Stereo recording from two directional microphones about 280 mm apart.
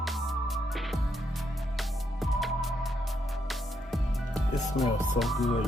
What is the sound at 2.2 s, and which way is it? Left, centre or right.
Music, centre.